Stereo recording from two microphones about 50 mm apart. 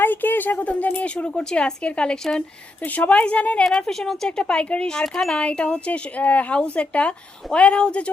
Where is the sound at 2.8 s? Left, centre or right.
Left.